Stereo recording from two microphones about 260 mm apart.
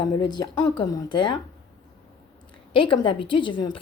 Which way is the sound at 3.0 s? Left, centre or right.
Centre.